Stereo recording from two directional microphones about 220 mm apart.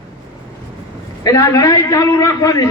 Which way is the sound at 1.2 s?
15° left (ahead or behind).